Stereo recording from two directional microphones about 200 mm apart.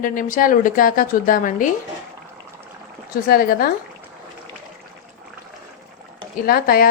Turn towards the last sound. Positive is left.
turn(degrees=45)  # may be behind; listen again after turning